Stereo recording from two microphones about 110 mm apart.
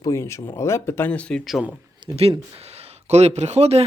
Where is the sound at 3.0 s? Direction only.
80° right.